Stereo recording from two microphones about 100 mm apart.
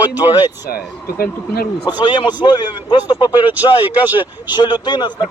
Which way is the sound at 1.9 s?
45° left (ahead or behind).